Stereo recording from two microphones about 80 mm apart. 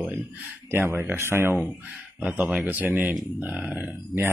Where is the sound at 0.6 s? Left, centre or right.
Right.